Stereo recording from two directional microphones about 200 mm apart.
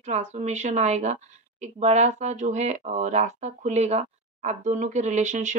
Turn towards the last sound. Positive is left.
turn(degrees=-35)  # may be behind; listen again after turning